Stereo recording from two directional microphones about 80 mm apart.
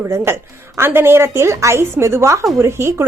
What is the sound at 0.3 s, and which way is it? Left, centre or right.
A woman's voice, right.